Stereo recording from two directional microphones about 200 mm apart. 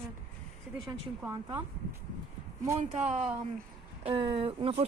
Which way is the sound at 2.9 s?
35° right (ahead or behind).